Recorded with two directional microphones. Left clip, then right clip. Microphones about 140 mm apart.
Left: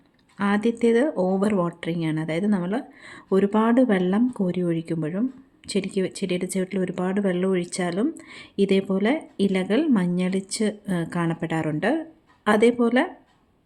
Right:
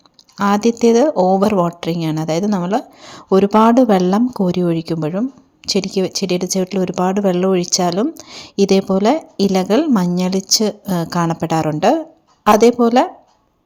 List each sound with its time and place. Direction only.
0.3 s speech: 35° right (ahead or behind)